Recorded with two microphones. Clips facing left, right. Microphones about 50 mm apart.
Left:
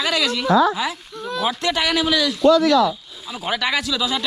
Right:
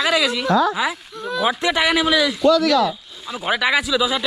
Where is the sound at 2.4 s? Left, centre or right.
Left.